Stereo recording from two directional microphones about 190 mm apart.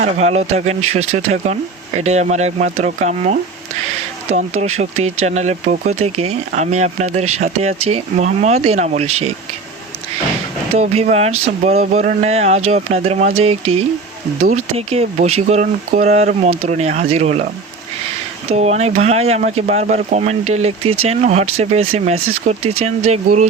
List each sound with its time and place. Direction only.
0.0 s speech: 35° right (ahead or behind)
4.5 s speech: 90° right
4.8 s speech: 35° right (ahead or behind)
10.8 s speech: 35° right (ahead or behind)